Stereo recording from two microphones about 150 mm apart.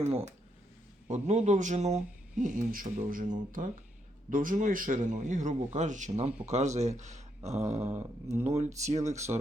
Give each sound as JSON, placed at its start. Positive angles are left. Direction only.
{"t": 0.0, "sound": "speech", "side_deg": -45}